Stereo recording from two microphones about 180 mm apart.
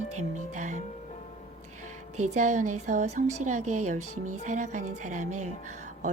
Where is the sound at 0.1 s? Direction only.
40° right (ahead or behind).